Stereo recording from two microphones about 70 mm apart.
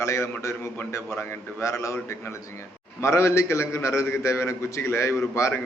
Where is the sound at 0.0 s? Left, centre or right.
Left.